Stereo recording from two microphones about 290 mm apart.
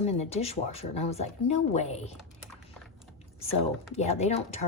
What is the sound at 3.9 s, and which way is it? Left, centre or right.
Speech, left.